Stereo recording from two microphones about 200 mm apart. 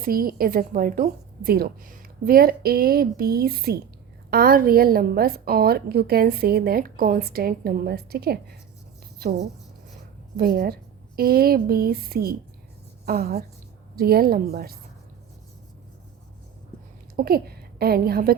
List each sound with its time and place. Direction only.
0.0 s a woman's voice: 45° right (ahead or behind)
10.3 s a woman's voice: 50° right (ahead or behind)
17.2 s a woman's voice: 50° right (ahead or behind)